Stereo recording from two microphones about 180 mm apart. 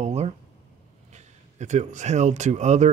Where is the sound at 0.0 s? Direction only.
35° right (ahead or behind).